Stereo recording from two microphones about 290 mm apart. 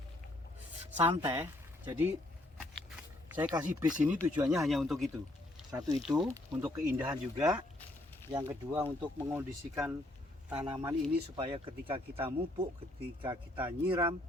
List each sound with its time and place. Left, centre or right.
1.0 s speech: centre
11.3 s speech: centre